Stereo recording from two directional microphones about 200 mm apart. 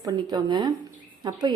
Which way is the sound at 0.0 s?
20° right (ahead or behind).